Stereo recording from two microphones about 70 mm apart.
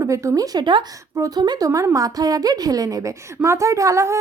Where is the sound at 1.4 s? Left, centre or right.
Right.